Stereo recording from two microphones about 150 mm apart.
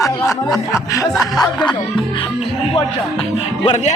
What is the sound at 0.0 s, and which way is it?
Speech, 20° left (ahead or behind).